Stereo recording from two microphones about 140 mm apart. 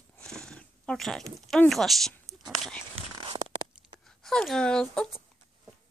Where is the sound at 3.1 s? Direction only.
35° right (ahead or behind).